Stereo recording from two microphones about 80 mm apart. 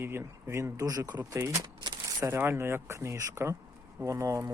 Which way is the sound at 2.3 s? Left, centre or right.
Right.